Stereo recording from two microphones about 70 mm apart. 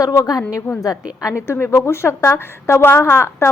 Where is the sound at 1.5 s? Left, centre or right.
Left.